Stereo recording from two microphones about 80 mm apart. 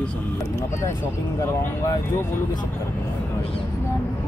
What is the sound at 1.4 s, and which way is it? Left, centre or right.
Speech, left.